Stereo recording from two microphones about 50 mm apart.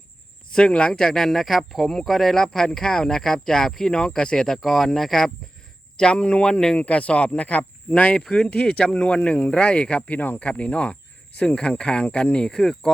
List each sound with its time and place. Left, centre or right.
0.5 s speech: centre
6.0 s speech: left
6.7 s speech: left; by 12.9 s centre